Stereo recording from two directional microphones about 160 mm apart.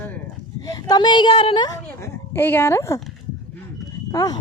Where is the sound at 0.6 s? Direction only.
25° left (ahead or behind).